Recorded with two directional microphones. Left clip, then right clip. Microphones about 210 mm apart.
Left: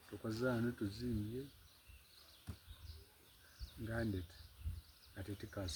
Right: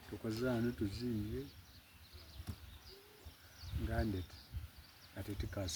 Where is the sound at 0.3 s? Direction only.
10° left (ahead or behind).